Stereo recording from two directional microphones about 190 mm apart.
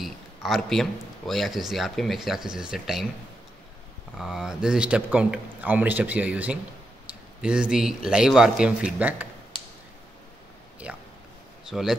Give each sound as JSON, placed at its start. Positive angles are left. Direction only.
{"t": 0.0, "sound": "a man's voice", "side_deg": 0}
{"t": 4.2, "sound": "a man's voice", "side_deg": 0}
{"t": 10.9, "sound": "speech", "side_deg": -5}